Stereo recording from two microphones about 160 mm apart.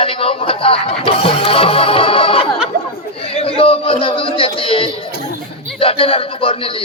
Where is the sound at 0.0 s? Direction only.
35° left (ahead or behind).